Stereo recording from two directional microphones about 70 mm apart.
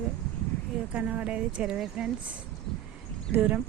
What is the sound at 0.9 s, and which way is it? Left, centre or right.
Speech, right.